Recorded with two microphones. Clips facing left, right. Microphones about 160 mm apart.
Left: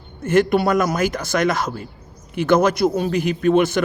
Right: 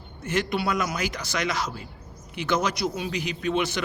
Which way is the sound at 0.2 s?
50° left (ahead or behind).